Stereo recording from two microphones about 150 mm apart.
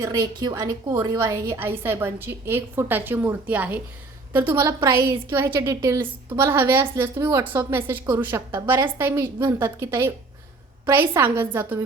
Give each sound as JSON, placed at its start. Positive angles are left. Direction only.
{"t": 0.0, "sound": "a woman's voice", "side_deg": -25}